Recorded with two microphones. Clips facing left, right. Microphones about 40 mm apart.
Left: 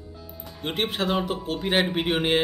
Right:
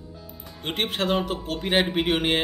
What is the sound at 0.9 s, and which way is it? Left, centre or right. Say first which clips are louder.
Speech: right 2 dB; centre.